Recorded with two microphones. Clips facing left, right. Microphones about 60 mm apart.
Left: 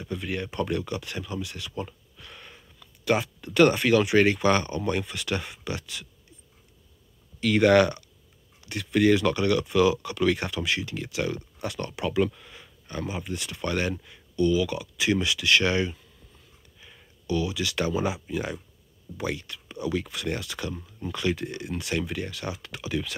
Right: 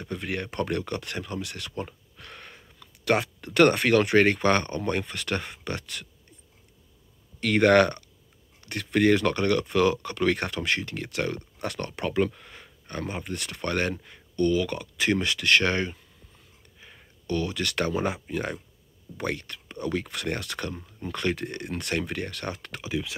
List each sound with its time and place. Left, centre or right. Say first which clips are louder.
0.0 s speech: even; right
2.1 s a sound: right 2 dB; right
2.8 s speech: right 1 dB; right
7.3 s speech: even; right
16.8 s a sound: right 1 dB; right
17.3 s speech: left 1 dB; right
20.7 s speech: even; right
22.8 s speech: left 1 dB; centre